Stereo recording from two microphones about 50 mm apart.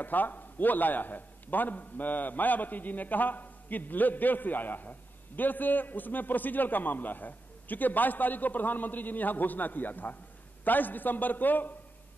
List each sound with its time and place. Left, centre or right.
0.0 s a man's voice: left